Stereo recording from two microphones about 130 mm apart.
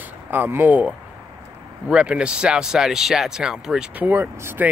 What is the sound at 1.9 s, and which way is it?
Speech, 5° right (ahead or behind).